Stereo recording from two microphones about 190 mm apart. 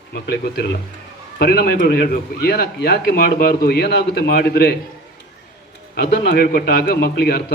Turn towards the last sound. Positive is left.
turn(degrees=55)  # may be behind; listen again after turning